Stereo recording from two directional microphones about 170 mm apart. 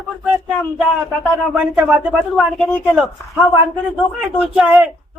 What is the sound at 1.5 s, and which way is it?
Speech, 5° right (ahead or behind).